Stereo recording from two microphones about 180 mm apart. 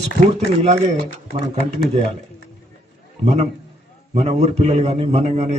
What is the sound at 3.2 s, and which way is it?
A man's voice, 40° right (ahead or behind).